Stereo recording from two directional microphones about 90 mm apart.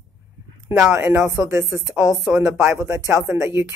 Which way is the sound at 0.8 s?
25° right (ahead or behind).